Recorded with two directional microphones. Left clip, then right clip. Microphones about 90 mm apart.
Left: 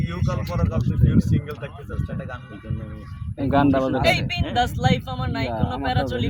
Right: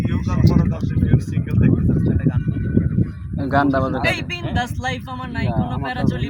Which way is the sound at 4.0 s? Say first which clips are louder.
Left 1 dB; 20° left (ahead or behind).